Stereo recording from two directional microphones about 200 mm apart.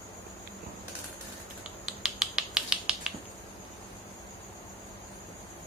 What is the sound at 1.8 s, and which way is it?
Finger snapping, centre (ahead or behind).